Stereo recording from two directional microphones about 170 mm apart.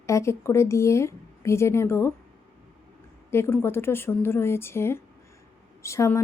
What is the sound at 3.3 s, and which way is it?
Speech, 15° left (ahead or behind).